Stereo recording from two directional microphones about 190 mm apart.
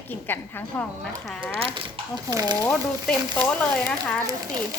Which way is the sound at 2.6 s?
5° left (ahead or behind).